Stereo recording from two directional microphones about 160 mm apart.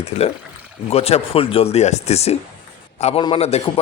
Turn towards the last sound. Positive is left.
turn(degrees=40)  # may be behind; listen again after turning